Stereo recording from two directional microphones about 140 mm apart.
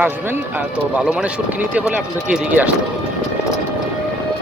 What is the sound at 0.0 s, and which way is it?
Speech, 15° right (ahead or behind).